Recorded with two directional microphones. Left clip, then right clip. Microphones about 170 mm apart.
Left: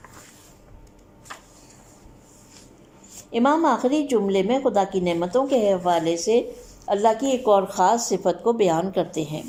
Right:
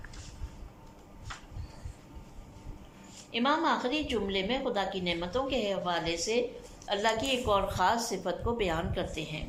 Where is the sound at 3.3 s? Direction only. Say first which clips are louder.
Left 8 dB; 40° left (ahead or behind).